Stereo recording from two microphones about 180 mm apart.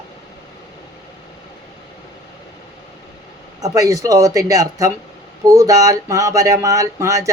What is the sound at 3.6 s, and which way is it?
Speech, 20° right (ahead or behind).